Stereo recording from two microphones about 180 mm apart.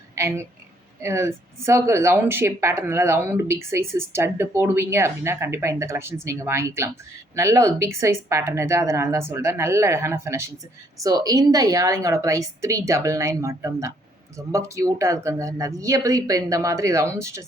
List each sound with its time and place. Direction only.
0.2 s speech: 15° right (ahead or behind)